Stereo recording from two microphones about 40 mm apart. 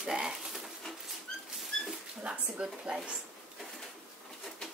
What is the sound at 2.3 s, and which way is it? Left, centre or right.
Speech, right.